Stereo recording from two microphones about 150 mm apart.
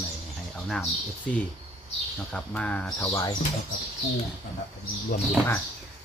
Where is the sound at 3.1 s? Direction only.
25° left (ahead or behind).